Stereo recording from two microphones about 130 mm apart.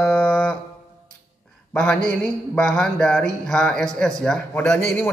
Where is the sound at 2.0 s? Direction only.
5° left (ahead or behind).